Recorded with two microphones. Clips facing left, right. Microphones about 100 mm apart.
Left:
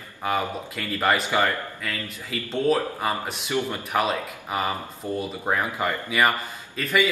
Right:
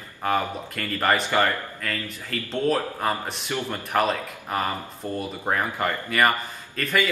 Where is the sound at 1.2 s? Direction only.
15° left (ahead or behind).